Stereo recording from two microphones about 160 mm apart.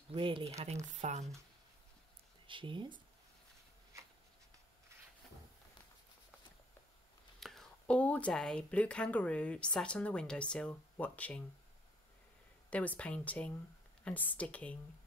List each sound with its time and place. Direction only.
0.1 s speech: 35° right (ahead or behind)
1.0 s speech: 45° right (ahead or behind)
2.4 s speech: 30° right (ahead or behind)
7.3 s speech: centre (ahead or behind)
12.6 s speech: 10° left (ahead or behind)